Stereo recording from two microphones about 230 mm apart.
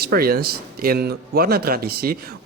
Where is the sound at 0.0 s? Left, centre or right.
Right.